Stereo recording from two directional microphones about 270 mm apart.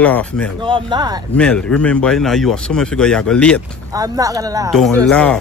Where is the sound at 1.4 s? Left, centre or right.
Centre.